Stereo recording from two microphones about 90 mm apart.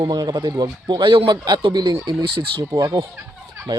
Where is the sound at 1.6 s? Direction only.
50° right (ahead or behind).